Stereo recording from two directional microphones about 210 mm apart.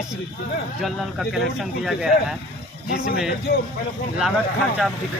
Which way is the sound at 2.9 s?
45° left (ahead or behind).